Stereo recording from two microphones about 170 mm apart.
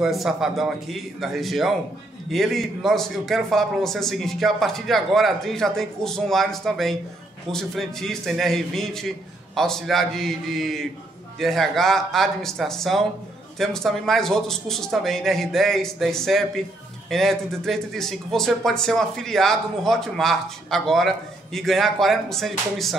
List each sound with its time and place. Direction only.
0.0 s a man's voice: centre (ahead or behind)